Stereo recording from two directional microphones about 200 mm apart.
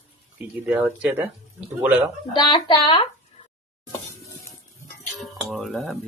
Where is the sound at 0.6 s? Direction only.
5° right (ahead or behind).